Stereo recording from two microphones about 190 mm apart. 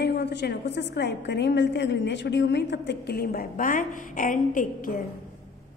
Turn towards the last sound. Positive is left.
turn(degrees=45)  # may be behind; listen again after turning